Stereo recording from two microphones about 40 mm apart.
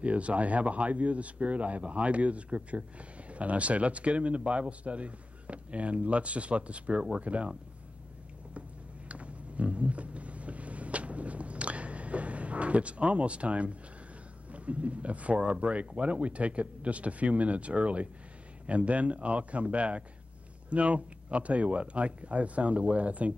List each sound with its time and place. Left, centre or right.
0.0 s speech: right
9.1 s a sound: right
14.5 s speech: right